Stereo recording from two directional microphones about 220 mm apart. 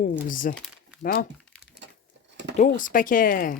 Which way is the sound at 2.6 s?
35° left (ahead or behind).